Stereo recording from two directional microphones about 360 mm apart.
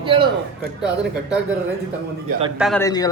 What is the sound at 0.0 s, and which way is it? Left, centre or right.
Speech, centre.